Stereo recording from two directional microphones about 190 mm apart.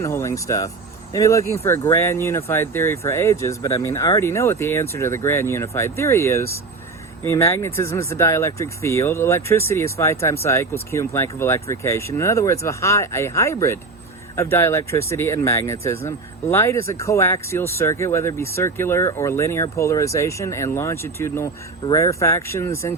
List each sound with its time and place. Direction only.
0.0 s speech: 15° left (ahead or behind)